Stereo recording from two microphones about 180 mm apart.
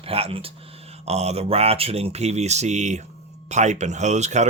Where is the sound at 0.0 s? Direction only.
35° right (ahead or behind).